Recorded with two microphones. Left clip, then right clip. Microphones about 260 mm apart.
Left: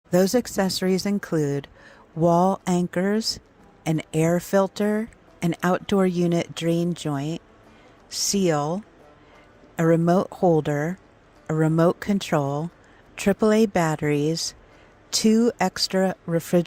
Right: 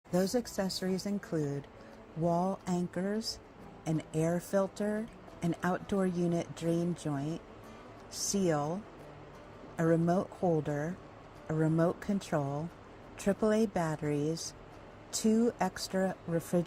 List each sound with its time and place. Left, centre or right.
0.3 s speech: left
9.8 s speech: left